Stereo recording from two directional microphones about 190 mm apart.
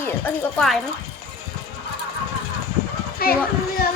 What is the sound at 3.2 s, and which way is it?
Speech, 50° left (ahead or behind).